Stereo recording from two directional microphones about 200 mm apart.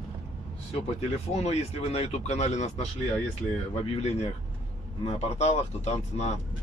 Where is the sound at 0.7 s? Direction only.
30° left (ahead or behind).